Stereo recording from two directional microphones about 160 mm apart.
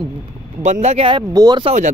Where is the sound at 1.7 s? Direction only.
50° right (ahead or behind).